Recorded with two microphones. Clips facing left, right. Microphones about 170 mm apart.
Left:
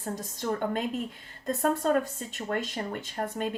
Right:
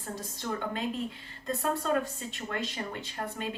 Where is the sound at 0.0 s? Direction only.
45° left (ahead or behind).